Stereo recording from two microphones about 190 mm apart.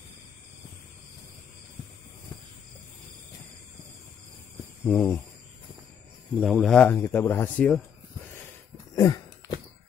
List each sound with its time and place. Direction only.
4.8 s speech: 10° left (ahead or behind)
6.3 s speech: centre (ahead or behind)
8.9 s a sound: 20° left (ahead or behind)